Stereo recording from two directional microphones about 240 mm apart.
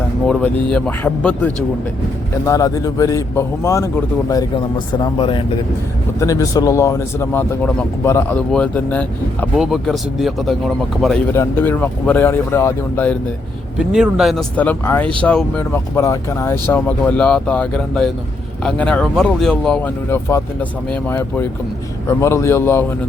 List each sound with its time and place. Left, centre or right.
0.3 s speech: centre
4.9 s speech: centre
13.7 s speech: centre